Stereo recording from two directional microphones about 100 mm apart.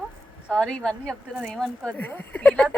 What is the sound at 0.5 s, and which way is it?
Speech, 5° left (ahead or behind).